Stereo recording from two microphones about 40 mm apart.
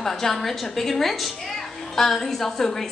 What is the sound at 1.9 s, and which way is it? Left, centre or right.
Speech, centre.